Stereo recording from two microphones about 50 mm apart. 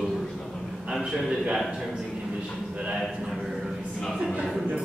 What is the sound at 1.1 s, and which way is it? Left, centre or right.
Speech, centre.